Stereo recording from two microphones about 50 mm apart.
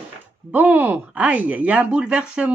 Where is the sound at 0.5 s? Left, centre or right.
Right.